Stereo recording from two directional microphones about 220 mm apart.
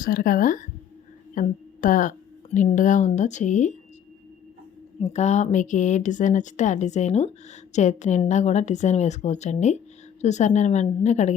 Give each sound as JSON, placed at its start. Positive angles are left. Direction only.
{"t": 0.0, "sound": "a woman's voice", "side_deg": 40}
{"t": 4.9, "sound": "a woman's voice", "side_deg": 30}